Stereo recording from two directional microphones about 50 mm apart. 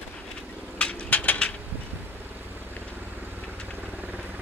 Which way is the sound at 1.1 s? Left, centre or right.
Left.